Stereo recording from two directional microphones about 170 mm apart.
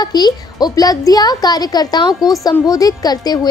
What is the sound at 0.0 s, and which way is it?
A woman's voice, 25° left (ahead or behind).